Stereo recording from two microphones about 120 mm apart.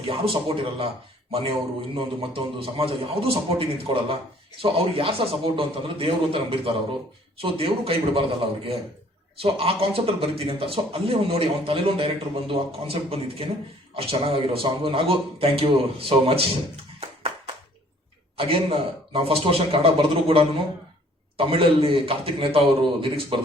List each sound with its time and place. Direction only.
0.1 s speech: 50° right (ahead or behind)
9.4 s speech: 50° right (ahead or behind)
18.3 s speech: 50° right (ahead or behind)